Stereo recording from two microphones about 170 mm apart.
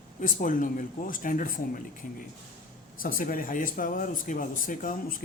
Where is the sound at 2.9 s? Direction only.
55° left (ahead or behind).